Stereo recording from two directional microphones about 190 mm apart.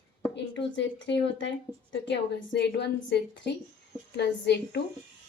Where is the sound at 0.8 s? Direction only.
70° left (ahead or behind).